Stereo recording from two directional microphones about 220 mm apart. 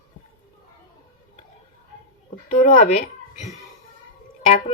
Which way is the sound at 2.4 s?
35° left (ahead or behind).